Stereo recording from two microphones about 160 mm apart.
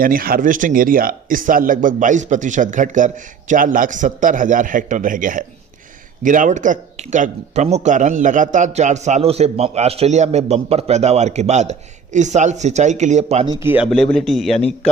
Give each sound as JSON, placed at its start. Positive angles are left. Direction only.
{"t": 0.0, "sound": "a man's voice", "side_deg": -65}
{"t": 13.5, "sound": "speech", "side_deg": -15}
{"t": 14.1, "sound": "a man's voice", "side_deg": 0}